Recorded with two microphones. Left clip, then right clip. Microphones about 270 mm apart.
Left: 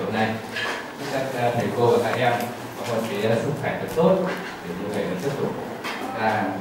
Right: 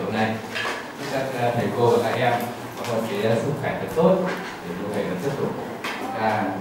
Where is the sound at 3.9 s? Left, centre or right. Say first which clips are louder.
Even; right.